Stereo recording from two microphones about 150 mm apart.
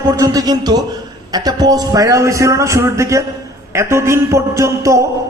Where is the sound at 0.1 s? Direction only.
25° right (ahead or behind).